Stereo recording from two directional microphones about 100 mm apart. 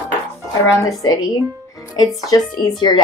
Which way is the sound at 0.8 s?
35° left (ahead or behind).